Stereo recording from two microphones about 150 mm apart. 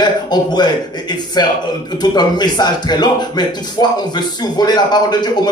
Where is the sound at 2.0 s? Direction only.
30° left (ahead or behind).